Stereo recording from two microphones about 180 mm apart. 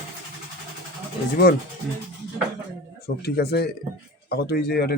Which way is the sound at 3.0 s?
65° left (ahead or behind).